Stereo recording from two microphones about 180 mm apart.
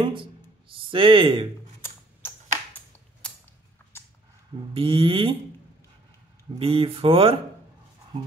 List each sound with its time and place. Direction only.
0.0 s speech: 30° right (ahead or behind)
4.7 s speech: 30° right (ahead or behind)
6.6 s speech: 30° right (ahead or behind)